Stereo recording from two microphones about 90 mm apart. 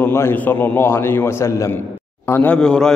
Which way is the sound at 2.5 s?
10° left (ahead or behind).